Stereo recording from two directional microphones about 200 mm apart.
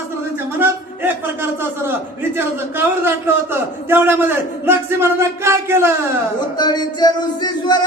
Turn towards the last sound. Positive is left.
turn(degrees=20)  # may be behind; listen again after turning